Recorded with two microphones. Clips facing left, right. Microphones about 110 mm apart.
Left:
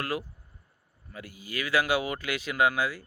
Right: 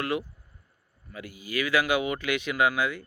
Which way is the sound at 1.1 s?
30° left (ahead or behind).